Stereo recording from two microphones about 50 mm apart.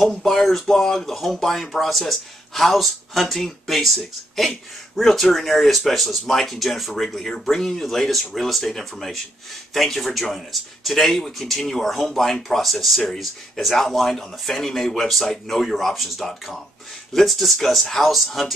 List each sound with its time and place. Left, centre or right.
0.0 s speech: centre